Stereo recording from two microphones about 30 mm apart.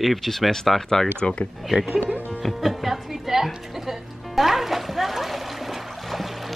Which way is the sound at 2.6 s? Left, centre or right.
Centre.